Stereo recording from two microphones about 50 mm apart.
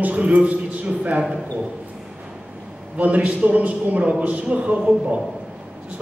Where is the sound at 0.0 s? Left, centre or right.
Right.